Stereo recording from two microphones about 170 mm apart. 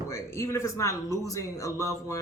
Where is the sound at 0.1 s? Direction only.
15° left (ahead or behind).